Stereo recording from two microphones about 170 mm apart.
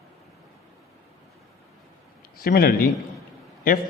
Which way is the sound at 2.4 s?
60° left (ahead or behind).